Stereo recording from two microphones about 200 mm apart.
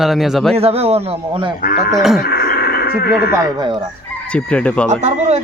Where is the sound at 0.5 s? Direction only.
30° right (ahead or behind).